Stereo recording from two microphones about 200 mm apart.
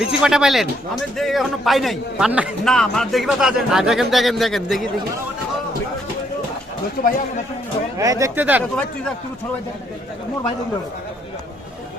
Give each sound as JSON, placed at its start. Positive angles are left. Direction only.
{"t": 0.2, "sound": "a man's voice", "side_deg": 0}
{"t": 7.0, "sound": "speech", "side_deg": 45}
{"t": 7.9, "sound": "speech", "side_deg": -15}
{"t": 8.7, "sound": "a man's voice", "side_deg": 5}